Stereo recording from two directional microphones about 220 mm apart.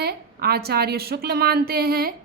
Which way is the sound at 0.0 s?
45° right (ahead or behind).